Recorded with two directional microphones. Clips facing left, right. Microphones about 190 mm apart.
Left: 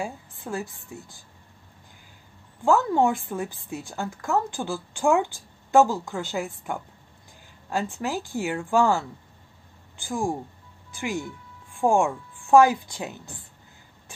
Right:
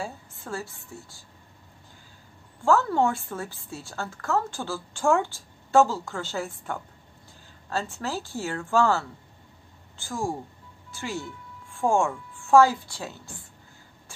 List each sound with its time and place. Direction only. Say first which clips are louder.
0.0 s a woman's voice: left 3 dB; 15° left (ahead or behind)
2.6 s a woman's voice: left 1 dB; 15° left (ahead or behind)